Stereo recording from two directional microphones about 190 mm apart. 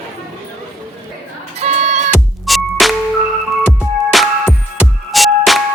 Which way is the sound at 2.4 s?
Centre (ahead or behind).